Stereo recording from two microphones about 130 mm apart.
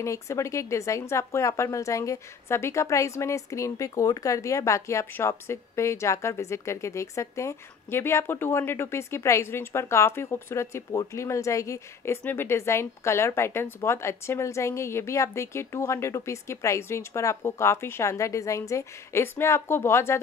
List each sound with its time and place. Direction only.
0.0 s speech: 20° left (ahead or behind)